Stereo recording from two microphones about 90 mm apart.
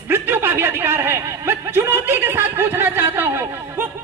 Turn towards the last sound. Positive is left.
turn(degrees=-20)  # may be behind; listen again after turning